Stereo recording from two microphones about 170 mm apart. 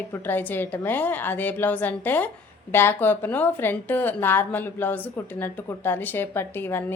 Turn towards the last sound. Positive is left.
turn(degrees=10)  # may be behind; listen again after turning